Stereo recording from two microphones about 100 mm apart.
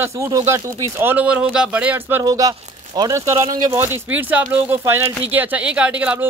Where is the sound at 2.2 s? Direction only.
35° right (ahead or behind).